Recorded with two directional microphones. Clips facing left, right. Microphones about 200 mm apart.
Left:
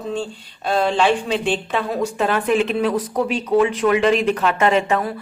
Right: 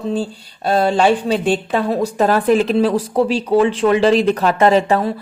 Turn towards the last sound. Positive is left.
turn(degrees=-35)  # may be behind; listen again after turning